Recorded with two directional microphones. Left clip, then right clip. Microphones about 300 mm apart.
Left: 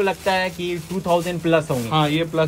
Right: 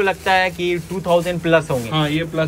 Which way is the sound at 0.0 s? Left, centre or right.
Centre.